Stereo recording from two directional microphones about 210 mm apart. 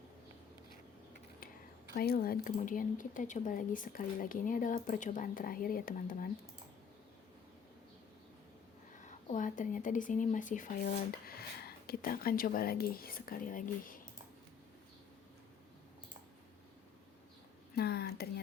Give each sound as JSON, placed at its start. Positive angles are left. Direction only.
{"t": 2.0, "sound": "speech", "side_deg": 45}
{"t": 9.0, "sound": "speech", "side_deg": 35}
{"t": 17.7, "sound": "a sound", "side_deg": 50}